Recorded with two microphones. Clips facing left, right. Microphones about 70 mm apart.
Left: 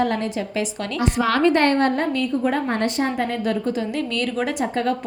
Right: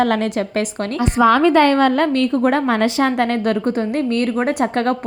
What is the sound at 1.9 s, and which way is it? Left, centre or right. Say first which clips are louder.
A woman's voice: right 6 dB; right.